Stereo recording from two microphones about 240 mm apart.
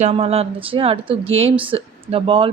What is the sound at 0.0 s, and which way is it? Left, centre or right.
Speech, right.